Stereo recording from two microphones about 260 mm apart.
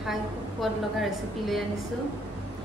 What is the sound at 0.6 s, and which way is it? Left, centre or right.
A woman's voice, centre.